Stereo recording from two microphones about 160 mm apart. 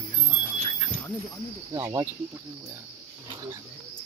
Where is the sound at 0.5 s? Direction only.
40° right (ahead or behind).